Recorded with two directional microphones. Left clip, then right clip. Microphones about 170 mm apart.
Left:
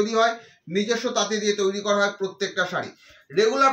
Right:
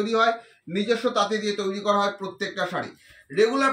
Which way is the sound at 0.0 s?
20° left (ahead or behind).